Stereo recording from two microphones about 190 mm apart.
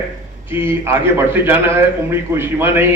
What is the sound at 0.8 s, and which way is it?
A man's voice, 15° right (ahead or behind).